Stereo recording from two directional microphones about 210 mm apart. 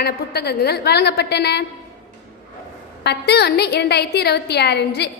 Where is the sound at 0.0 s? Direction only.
50° left (ahead or behind).